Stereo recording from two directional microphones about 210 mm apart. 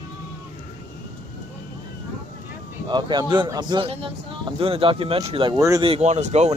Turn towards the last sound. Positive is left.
turn(degrees=-35)  # may be behind; listen again after turning